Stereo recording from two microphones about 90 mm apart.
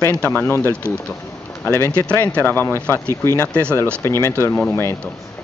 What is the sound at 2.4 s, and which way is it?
Speech, 25° left (ahead or behind).